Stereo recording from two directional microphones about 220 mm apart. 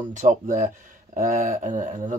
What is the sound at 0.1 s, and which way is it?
Speech, 35° right (ahead or behind).